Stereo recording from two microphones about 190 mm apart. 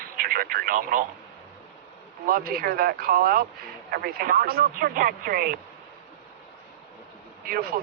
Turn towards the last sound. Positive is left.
turn(degrees=-50)  # may be behind; listen again after turning